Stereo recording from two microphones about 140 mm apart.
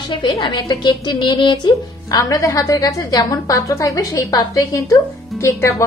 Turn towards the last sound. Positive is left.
turn(degrees=20)  # may be behind; listen again after turning